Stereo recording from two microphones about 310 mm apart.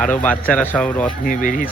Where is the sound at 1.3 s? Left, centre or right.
Left.